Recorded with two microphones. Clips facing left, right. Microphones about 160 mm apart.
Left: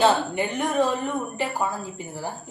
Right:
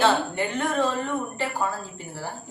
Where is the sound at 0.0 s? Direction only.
15° left (ahead or behind).